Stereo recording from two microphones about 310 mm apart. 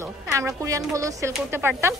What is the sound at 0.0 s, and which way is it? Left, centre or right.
A man's voice, centre.